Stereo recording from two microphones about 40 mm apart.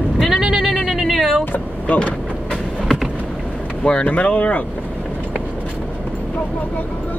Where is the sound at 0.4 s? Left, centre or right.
Centre.